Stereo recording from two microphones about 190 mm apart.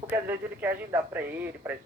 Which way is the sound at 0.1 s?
10° right (ahead or behind).